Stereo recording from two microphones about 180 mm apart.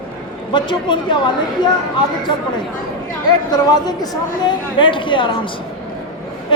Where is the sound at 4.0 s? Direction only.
25° left (ahead or behind).